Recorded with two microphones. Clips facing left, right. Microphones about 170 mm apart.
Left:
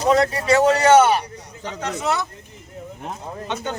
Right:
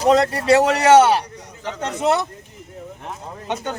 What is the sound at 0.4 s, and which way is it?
Speech, 75° right (ahead or behind).